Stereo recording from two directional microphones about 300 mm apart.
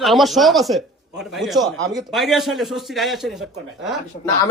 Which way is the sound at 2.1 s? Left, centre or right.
Centre.